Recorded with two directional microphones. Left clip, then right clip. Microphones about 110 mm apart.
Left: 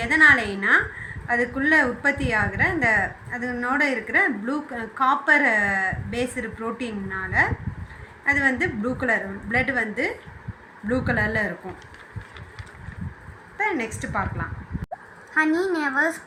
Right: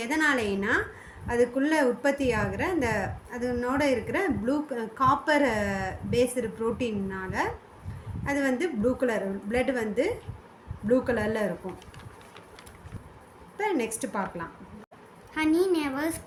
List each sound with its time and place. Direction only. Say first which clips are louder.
0.0 s a woman's voice: left 9 dB; 45° right (ahead or behind)
13.6 s a woman's voice: left 3 dB; 45° right (ahead or behind)
15.4 s a woman's voice: left 3 dB; 5° left (ahead or behind)